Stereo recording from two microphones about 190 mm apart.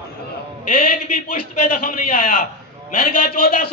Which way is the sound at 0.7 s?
45° left (ahead or behind).